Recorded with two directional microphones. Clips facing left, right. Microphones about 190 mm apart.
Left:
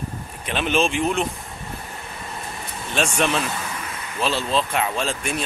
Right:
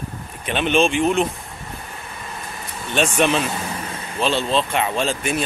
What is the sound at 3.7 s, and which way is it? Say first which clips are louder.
Vehicle: right 3 dB; 30° right (ahead or behind).